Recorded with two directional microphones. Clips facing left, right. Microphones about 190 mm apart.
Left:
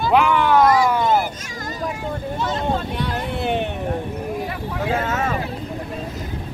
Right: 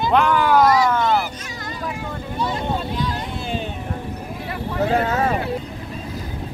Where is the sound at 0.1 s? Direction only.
5° left (ahead or behind).